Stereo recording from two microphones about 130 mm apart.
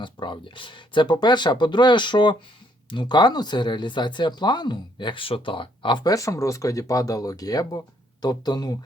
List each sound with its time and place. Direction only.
0.0 s speech: 40° left (ahead or behind)